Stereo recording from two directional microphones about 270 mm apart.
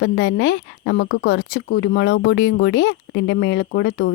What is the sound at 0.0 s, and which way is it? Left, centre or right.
Speech, left.